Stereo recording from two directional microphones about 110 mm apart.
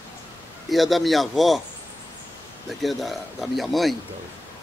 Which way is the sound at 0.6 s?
Centre (ahead or behind).